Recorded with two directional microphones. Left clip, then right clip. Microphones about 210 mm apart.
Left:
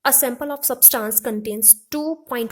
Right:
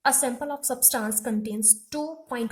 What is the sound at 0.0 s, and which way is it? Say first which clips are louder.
A woman's voice: left 4 dB; 45° left (ahead or behind).